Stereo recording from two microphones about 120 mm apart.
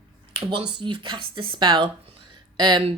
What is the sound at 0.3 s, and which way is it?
A woman's voice, 40° right (ahead or behind).